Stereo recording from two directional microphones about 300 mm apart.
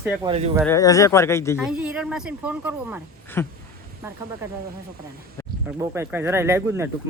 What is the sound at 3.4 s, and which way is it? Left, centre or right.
Speech, centre.